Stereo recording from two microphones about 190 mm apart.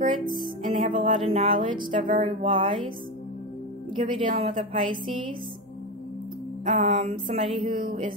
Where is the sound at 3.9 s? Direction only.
25° right (ahead or behind).